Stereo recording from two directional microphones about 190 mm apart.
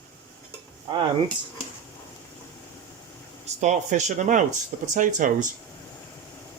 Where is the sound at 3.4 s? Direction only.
40° right (ahead or behind).